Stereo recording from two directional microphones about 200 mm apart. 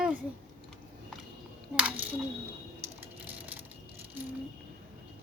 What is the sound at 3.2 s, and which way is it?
Crushing, 10° right (ahead or behind).